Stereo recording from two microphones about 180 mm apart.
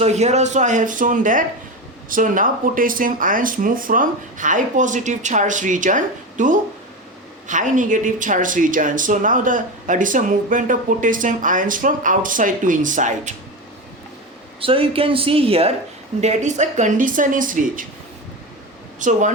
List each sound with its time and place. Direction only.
0.0 s speech: 40° right (ahead or behind)
14.6 s speech: 30° right (ahead or behind); by 17.8 s 45° right (ahead or behind)
18.9 s speech: 45° right (ahead or behind)